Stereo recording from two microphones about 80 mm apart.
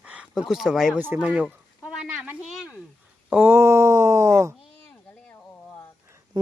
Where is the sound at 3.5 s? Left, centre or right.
Right.